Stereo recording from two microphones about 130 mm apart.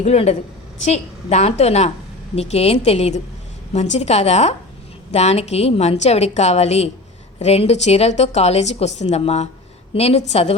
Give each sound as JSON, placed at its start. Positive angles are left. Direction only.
{"t": 0.0, "sound": "a woman's voice", "side_deg": 55}